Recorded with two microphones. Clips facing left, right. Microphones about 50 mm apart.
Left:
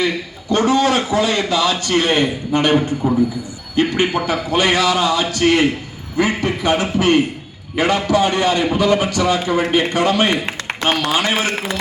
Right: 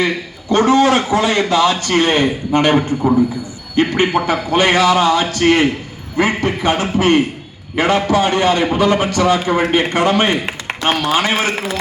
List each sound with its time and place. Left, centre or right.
0.5 s a man's voice: right